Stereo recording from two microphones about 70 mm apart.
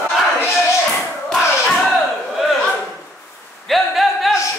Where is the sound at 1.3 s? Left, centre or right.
Centre.